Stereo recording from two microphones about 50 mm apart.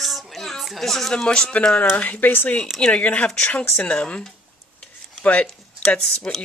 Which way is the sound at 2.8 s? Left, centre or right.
Left.